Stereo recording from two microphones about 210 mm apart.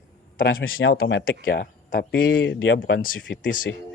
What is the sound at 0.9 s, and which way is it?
Speech, 50° left (ahead or behind).